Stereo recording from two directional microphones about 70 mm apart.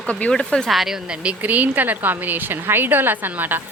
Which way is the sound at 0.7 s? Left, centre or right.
Centre.